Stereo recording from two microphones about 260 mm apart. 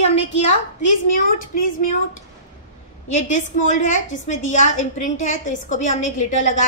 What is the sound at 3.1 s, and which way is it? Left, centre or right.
A woman's voice, left.